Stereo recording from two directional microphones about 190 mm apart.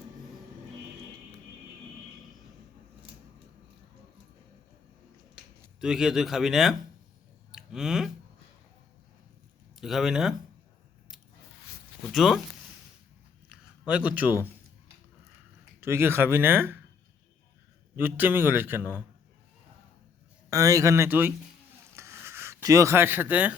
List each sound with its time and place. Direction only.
5.8 s speech: 5° right (ahead or behind)
7.5 s clicking: 5° right (ahead or behind)
9.7 s speech: centre (ahead or behind)
12.1 s speech: centre (ahead or behind)
13.5 s a man's voice: 5° right (ahead or behind)
15.8 s a man's voice: 10° right (ahead or behind)
17.9 s a man's voice: 10° right (ahead or behind)
20.5 s a man's voice: 15° right (ahead or behind)
21.9 s a sound: 15° right (ahead or behind)